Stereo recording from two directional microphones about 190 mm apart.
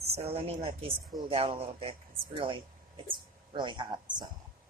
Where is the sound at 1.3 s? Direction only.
30° right (ahead or behind).